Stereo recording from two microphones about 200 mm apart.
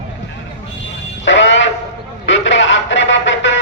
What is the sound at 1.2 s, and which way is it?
Fire alarm, 65° left (ahead or behind).